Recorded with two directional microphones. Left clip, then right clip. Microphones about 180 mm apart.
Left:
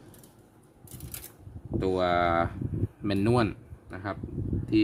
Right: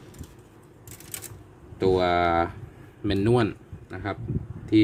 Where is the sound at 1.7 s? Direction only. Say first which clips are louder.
Right 4 dB; 5° left (ahead or behind).